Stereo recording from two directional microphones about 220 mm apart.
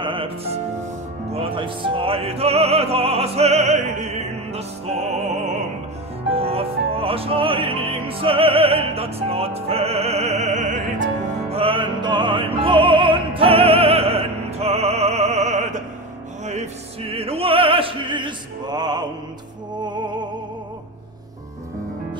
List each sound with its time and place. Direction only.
0.0 s music: 25° right (ahead or behind)
17.1 s opera: 25° right (ahead or behind)
19.8 s music: 20° right (ahead or behind)